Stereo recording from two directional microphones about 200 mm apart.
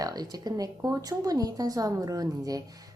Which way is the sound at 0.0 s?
20° right (ahead or behind).